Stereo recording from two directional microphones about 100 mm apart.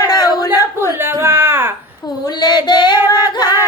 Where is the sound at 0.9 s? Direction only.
25° right (ahead or behind).